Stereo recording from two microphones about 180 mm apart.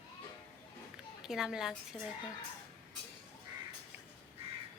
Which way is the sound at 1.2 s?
5° right (ahead or behind).